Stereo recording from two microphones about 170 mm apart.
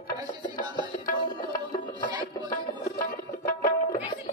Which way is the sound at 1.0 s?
55° left (ahead or behind).